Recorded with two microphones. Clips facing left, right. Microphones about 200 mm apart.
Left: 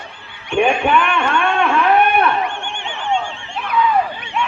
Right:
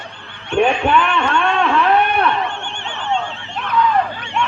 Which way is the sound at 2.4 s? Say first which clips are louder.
Left 1 dB; 15° left (ahead or behind).